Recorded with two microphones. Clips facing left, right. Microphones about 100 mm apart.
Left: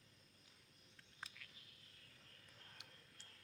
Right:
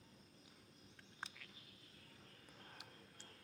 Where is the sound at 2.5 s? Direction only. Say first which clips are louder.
Right 5 dB; 25° right (ahead or behind).